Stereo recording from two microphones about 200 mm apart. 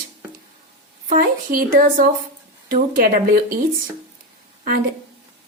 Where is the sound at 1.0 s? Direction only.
40° right (ahead or behind).